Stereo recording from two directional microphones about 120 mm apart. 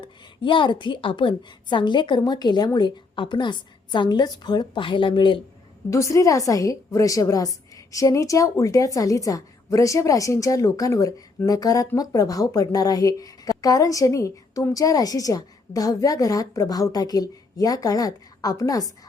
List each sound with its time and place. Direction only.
0.0 s a woman's voice: 45° left (ahead or behind)
5.9 s a woman's voice: 25° left (ahead or behind)